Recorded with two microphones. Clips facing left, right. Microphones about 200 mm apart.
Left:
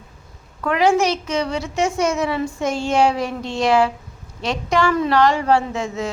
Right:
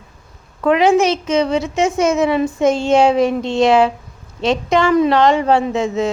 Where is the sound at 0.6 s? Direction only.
20° right (ahead or behind).